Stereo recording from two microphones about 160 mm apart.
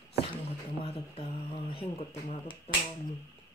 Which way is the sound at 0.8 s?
35° left (ahead or behind).